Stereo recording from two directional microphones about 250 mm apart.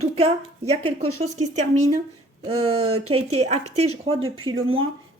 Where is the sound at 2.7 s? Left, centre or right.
Right.